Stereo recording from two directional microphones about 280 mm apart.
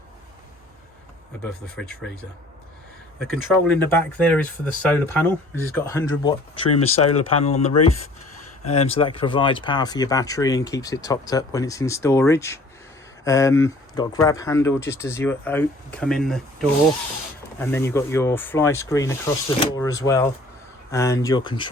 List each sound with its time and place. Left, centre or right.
1.7 s speech: centre
3.7 s speech: centre